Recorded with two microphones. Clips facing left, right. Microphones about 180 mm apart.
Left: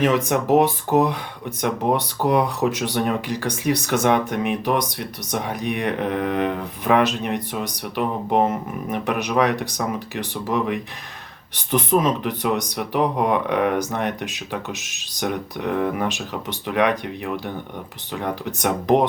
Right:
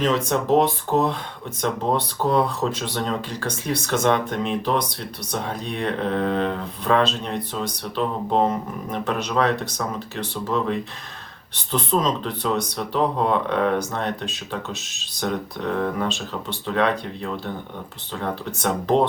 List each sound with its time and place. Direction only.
0.0 s speech: 15° left (ahead or behind)